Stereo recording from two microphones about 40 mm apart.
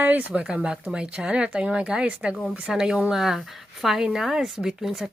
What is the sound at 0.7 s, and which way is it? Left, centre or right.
A woman's voice, right.